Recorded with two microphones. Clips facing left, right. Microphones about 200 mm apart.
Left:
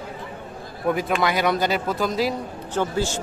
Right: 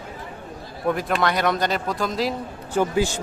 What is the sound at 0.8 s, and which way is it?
Speech, centre (ahead or behind).